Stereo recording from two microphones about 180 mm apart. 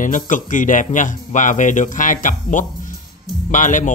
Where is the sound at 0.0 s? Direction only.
45° left (ahead or behind).